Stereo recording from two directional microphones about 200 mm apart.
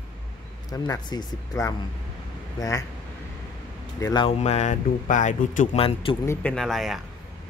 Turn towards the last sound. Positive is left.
turn(degrees=0)  # may be behind; listen again after turning